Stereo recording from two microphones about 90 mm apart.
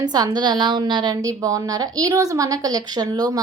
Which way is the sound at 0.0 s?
50° right (ahead or behind).